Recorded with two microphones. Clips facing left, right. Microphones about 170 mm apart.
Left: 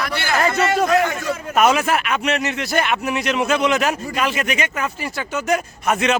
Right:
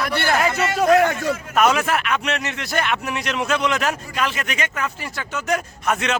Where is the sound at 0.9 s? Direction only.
55° right (ahead or behind).